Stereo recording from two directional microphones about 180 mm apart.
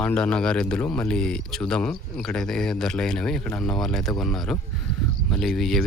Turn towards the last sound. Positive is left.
turn(degrees=0)  # may be behind; listen again after turning